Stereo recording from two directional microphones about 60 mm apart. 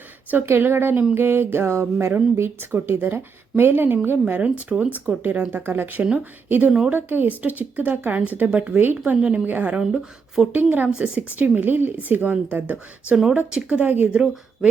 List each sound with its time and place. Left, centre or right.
0.4 s music: right
2.3 s a woman's voice: right
4.4 s a woman's voice: right
6.7 s speech: centre
6.9 s speech: right; by 9.4 s centre
9.5 s a woman's voice: right
9.8 s speech: centre
10.5 s a woman's voice: right
10.8 s speech: centre
11.3 s a woman's voice: right
13.5 s speech: right
14.1 s speech: centre